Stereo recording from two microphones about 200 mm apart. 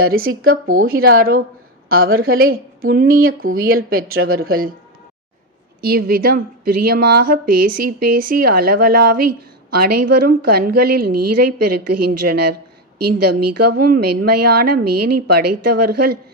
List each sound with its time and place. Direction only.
0.0 s speech: 50° right (ahead or behind)
5.8 s speech: 50° right (ahead or behind)